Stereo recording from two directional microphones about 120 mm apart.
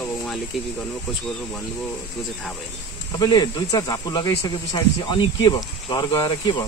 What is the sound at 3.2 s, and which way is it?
Speech, 35° left (ahead or behind).